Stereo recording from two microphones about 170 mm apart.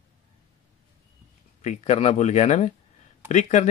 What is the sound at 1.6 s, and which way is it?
Speech, 45° left (ahead or behind).